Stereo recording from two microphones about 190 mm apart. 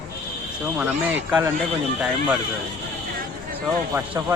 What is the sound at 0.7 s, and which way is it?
Speech, 5° right (ahead or behind).